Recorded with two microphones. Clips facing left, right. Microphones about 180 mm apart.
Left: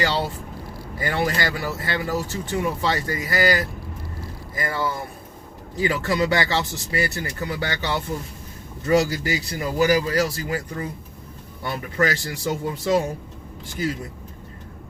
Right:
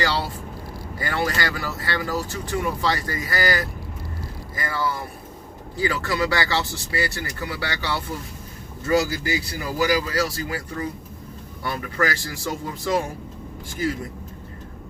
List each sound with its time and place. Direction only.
0.0 s speech: 20° left (ahead or behind)